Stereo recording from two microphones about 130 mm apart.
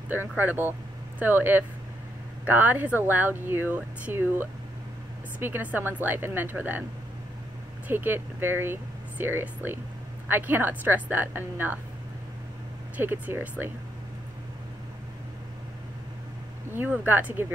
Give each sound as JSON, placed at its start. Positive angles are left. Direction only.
{"t": 0.4, "sound": "a woman's voice", "side_deg": -15}
{"t": 7.9, "sound": "a woman's voice", "side_deg": -15}
{"t": 12.9, "sound": "a woman's voice", "side_deg": -15}
{"t": 16.7, "sound": "a woman's voice", "side_deg": -15}